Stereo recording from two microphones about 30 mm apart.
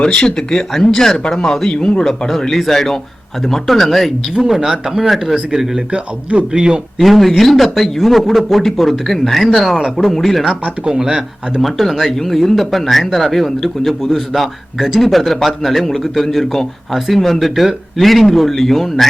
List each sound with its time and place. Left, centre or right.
0.1 s speech: left
2.0 s speech: centre
4.4 s speech: centre
7.0 s speech: centre
10.5 s speech: right
11.6 s speech: centre
15.1 s speech: centre